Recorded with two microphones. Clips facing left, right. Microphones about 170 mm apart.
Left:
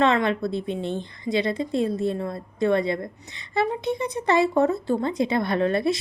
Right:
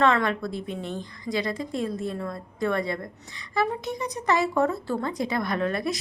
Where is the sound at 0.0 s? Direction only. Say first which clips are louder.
Left 2 dB; 20° left (ahead or behind).